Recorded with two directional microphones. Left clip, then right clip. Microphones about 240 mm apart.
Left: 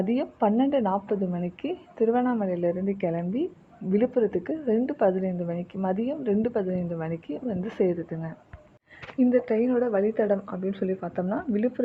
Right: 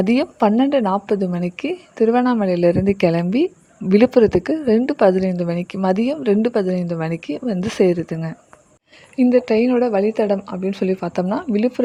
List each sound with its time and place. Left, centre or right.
0.0 s a woman's voice: right